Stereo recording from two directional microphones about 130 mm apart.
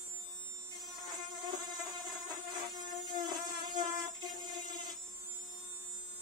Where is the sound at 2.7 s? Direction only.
30° right (ahead or behind).